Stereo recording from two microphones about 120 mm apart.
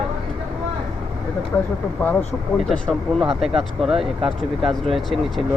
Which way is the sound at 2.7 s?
Centre (ahead or behind).